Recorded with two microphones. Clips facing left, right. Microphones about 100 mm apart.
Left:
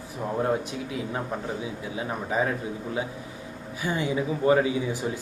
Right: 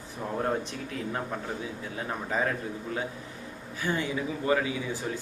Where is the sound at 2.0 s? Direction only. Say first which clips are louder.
Left 3 dB; 10° left (ahead or behind).